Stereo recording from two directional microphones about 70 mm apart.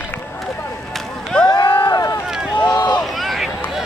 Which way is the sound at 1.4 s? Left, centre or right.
Left.